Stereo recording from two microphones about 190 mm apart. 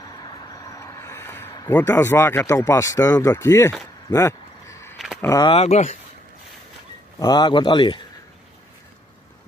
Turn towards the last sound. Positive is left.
turn(degrees=25)  # may be behind; listen again after turning